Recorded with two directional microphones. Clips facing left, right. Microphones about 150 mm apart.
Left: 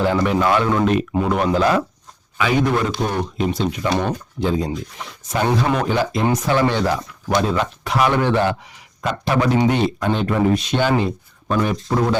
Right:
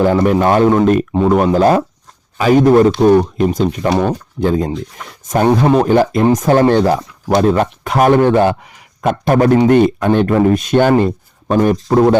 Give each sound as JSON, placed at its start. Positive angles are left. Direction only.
{"t": 0.0, "sound": "a man's voice", "side_deg": -45}
{"t": 5.6, "sound": "a man's voice", "side_deg": -35}
{"t": 5.9, "sound": "speech", "side_deg": -50}